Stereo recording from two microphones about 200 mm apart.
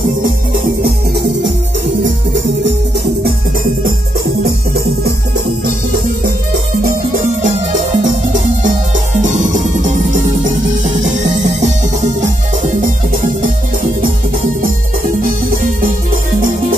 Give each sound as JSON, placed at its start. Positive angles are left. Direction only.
{"t": 0.8, "sound": "music", "side_deg": -55}
{"t": 2.0, "sound": "music", "side_deg": -65}
{"t": 8.0, "sound": "music", "side_deg": -40}
{"t": 11.0, "sound": "music", "side_deg": -40}
{"t": 15.2, "sound": "music", "side_deg": -45}